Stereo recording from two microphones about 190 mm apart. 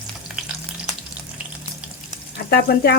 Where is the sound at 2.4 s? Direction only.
55° left (ahead or behind).